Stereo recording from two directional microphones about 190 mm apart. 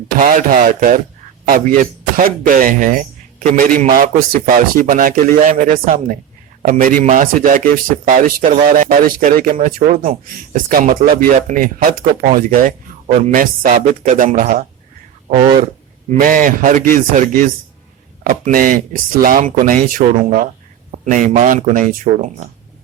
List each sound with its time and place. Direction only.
0.2 s speech: 45° right (ahead or behind)